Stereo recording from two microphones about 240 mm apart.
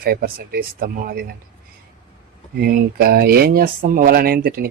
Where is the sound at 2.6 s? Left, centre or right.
Right.